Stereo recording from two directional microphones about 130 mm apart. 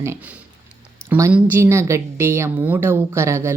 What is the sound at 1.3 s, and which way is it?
A woman's voice, 15° right (ahead or behind).